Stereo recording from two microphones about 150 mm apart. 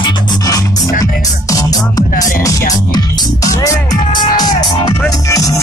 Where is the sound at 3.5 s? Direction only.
20° left (ahead or behind).